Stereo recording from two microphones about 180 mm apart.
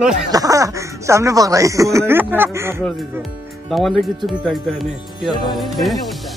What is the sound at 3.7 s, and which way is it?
Speech, centre (ahead or behind).